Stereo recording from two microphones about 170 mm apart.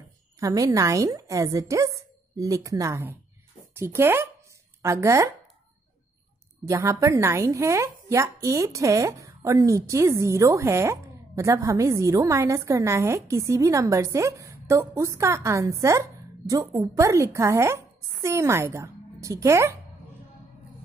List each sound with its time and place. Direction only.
0.4 s a woman's voice: 20° right (ahead or behind)
6.7 s a woman's voice: 20° right (ahead or behind)